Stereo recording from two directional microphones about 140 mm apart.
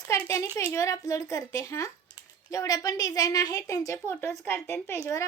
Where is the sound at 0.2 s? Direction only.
20° left (ahead or behind).